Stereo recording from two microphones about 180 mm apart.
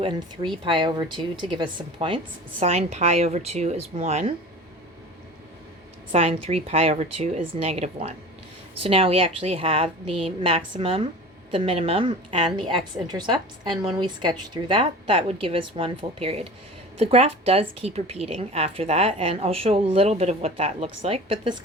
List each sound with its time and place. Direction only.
0.6 s a woman's voice: 25° right (ahead or behind)
6.1 s a woman's voice: 35° right (ahead or behind)